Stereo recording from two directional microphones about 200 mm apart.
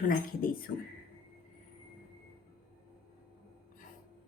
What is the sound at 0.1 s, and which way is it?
Speech, 45° left (ahead or behind).